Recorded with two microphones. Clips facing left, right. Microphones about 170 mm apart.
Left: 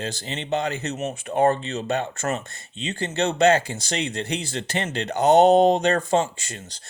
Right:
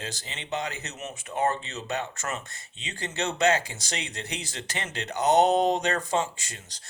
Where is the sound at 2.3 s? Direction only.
30° left (ahead or behind).